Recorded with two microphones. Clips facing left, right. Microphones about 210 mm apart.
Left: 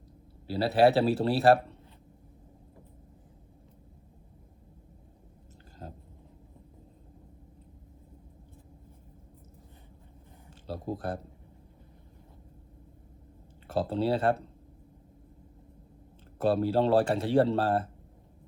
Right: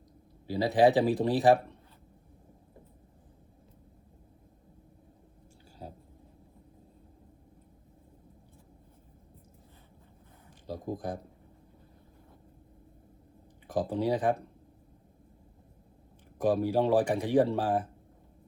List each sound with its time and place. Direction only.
0.4 s speech: 15° right (ahead or behind)
10.7 s speech: 15° right (ahead or behind)
13.7 s speech: 15° right (ahead or behind)
16.4 s speech: 15° right (ahead or behind)